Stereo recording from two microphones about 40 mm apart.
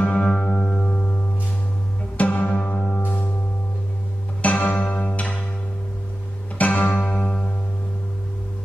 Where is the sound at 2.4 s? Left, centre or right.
Centre.